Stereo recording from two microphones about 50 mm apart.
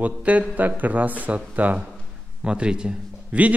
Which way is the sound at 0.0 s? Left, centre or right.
Right.